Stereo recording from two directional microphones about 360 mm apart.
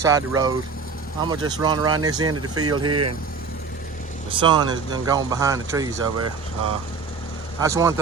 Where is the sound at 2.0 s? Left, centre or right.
Centre.